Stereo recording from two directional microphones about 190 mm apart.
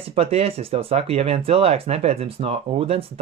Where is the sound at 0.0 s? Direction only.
30° right (ahead or behind).